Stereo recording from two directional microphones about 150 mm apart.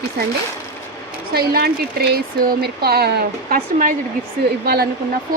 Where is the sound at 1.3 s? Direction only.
90° right; by 3.9 s 65° right (ahead or behind).